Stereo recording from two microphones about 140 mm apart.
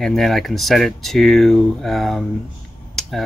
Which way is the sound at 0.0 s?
Centre (ahead or behind).